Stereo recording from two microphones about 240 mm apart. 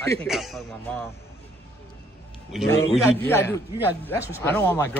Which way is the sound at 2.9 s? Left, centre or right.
Centre.